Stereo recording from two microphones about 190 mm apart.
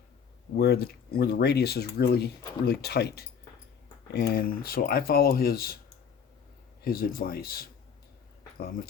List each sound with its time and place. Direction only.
0.5 s speech: 55° left (ahead or behind)
6.8 s speech: 50° left (ahead or behind)